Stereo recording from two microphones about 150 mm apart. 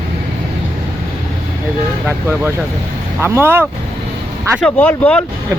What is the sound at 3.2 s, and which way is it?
Speech, 15° right (ahead or behind).